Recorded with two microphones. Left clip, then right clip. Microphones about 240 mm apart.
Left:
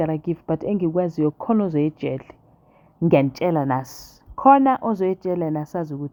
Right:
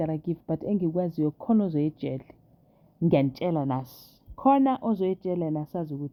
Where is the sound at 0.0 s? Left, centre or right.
Left.